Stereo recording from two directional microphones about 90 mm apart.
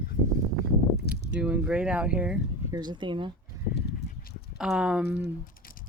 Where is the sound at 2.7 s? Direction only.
55° right (ahead or behind).